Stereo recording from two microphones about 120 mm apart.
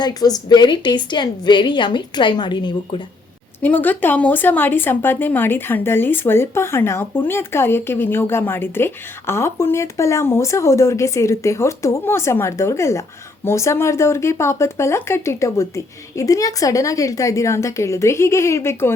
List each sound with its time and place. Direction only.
0.0 s a woman's voice: 30° left (ahead or behind)
3.6 s speech: 15° left (ahead or behind)